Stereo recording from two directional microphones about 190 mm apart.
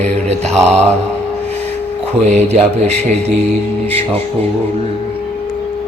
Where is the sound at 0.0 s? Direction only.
35° right (ahead or behind).